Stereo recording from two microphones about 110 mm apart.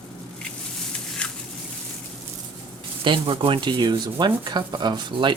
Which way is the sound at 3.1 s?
50° right (ahead or behind).